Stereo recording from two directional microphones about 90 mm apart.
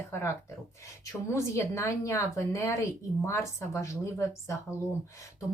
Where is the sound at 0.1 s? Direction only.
30° left (ahead or behind).